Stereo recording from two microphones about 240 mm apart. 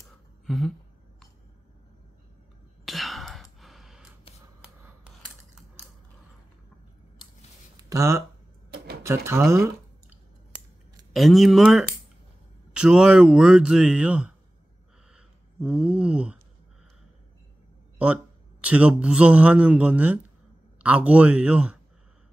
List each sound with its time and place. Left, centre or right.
0.5 s a sound: centre
2.8 s whispering: centre
3.5 s sigh: centre
7.9 s speech: centre
8.6 s cash register: right
9.0 s speech: centre
11.1 s speech: centre
17.9 s speech: centre